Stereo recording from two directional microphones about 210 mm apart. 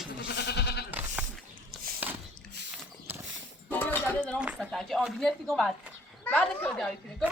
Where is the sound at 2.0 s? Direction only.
5° right (ahead or behind).